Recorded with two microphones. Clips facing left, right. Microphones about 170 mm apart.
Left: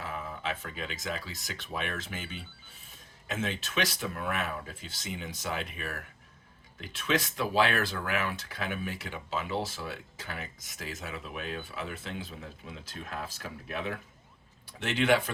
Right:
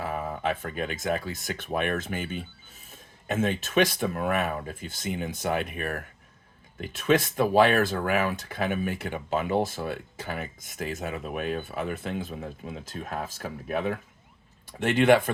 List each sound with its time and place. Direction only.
0.0 s speech: 50° right (ahead or behind)